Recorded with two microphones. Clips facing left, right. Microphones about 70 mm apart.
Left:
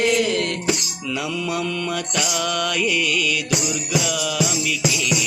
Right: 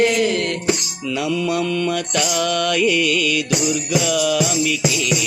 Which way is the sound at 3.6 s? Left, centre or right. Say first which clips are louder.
Right 4 dB; centre.